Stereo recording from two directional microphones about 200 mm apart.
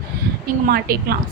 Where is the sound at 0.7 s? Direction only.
50° right (ahead or behind).